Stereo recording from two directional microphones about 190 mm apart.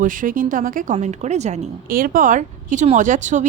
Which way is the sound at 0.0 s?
45° right (ahead or behind).